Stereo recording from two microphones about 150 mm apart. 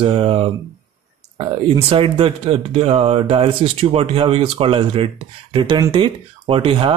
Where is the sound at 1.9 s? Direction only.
35° right (ahead or behind).